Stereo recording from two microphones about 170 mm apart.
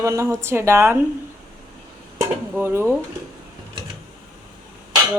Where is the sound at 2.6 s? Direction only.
15° right (ahead or behind).